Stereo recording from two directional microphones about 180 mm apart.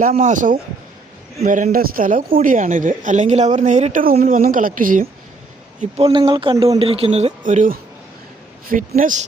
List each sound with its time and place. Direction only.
0.0 s speech: 45° right (ahead or behind)
6.0 s speech: 25° right (ahead or behind); by 9.1 s 50° right (ahead or behind)